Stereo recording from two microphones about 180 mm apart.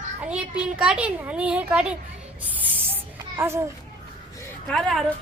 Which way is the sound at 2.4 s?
10° right (ahead or behind).